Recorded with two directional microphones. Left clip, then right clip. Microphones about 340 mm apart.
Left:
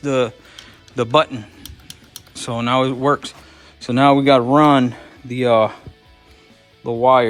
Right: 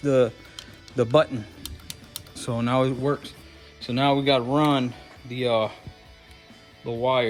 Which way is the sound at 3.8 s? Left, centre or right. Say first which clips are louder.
Left 9 dB; left.